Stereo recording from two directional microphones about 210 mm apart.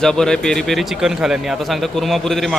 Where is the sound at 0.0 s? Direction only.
5° left (ahead or behind).